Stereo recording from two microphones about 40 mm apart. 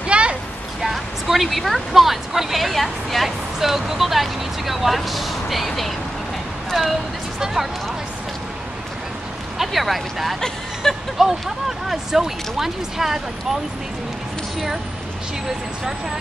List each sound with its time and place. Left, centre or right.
0.0 s a sound: right
0.9 s speech: centre
3.5 s speech: centre
7.3 s speech: centre
9.6 s speech: centre
10.8 s speech: centre
11.1 s speech: centre